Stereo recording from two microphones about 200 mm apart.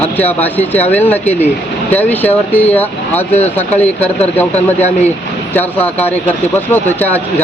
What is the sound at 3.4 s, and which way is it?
Speech, 35° left (ahead or behind).